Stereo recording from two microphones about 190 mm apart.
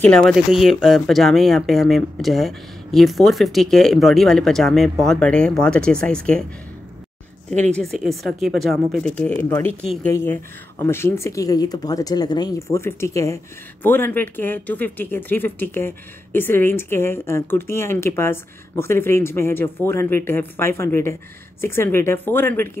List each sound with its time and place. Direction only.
0.0 s speech: 5° left (ahead or behind)
7.9 s speech: centre (ahead or behind)